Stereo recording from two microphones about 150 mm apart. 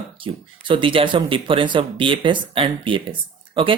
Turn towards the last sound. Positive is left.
turn(degrees=-35)  # may be behind; listen again after turning